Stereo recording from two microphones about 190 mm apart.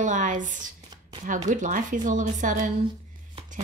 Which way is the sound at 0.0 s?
40° right (ahead or behind).